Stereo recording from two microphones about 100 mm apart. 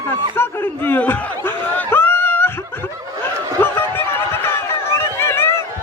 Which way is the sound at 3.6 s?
25° left (ahead or behind).